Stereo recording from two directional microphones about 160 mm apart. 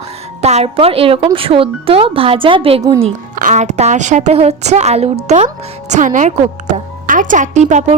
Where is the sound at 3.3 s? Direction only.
50° right (ahead or behind).